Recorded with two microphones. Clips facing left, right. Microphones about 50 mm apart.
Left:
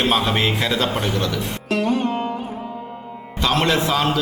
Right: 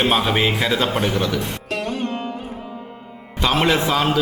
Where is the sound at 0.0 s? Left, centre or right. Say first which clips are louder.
Right 1 dB; centre.